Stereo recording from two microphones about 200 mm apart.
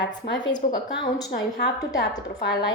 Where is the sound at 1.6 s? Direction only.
60° left (ahead or behind).